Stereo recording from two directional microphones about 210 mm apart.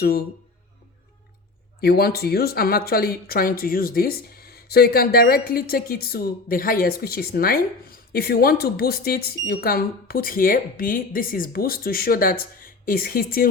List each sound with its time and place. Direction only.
1.8 s speech: 45° left (ahead or behind)